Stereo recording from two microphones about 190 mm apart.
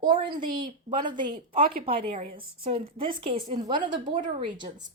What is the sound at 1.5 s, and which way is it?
Speech, 50° right (ahead or behind).